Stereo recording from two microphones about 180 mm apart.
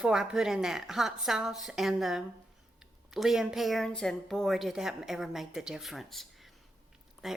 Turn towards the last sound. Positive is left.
turn(degrees=0)  # may be behind; listen again after turning